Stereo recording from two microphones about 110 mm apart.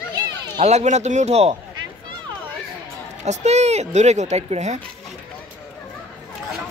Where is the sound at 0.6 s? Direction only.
90° right; by 1.6 s 75° right (ahead or behind).